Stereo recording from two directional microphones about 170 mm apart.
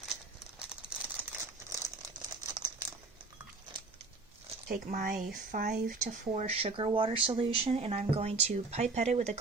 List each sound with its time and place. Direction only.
1.0 s crumpling: 10° right (ahead or behind)
2.5 s crumpling: 25° right (ahead or behind)
4.7 s speech: 55° right (ahead or behind)